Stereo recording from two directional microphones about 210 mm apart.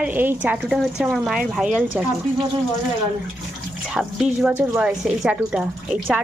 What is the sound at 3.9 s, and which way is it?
Speech, centre (ahead or behind).